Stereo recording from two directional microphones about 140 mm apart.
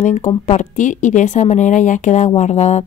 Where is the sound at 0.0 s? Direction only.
60° left (ahead or behind).